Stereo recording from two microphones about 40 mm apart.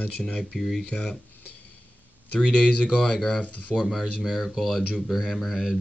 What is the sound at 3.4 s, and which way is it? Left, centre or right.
Speech, left.